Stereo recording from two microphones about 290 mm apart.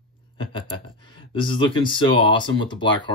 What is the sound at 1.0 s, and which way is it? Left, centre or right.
Speech, centre.